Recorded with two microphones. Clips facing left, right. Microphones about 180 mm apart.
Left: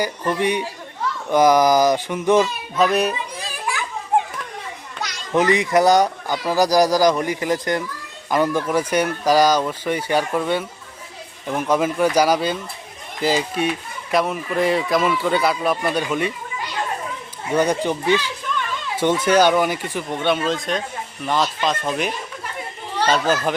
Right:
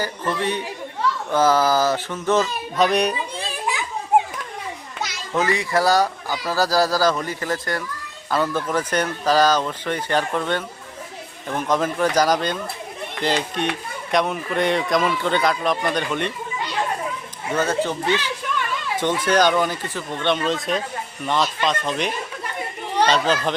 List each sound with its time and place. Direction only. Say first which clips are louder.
0.0 s speech: left 3 dB; 15° left (ahead or behind)
2.7 s speech: left 1 dB; centre (ahead or behind)
3.7 s children playing: even; 20° right (ahead or behind)
4.1 s children playing: right 2 dB; 10° right (ahead or behind)
5.3 s speech: left 4 dB; 20° left (ahead or behind)
17.5 s speech: left 3 dB; 15° left (ahead or behind)
19.2 s speech: left 2 dB; 10° left (ahead or behind)
23.1 s speech: left 1 dB; 5° left (ahead or behind)